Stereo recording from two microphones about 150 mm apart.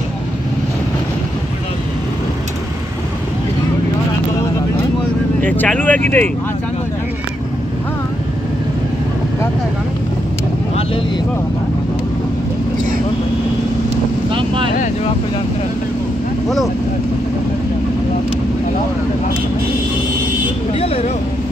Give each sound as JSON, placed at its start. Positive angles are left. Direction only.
{"t": 5.4, "sound": "speech", "side_deg": 10}
{"t": 14.3, "sound": "boat", "side_deg": -35}
{"t": 20.7, "sound": "vehicle", "side_deg": 45}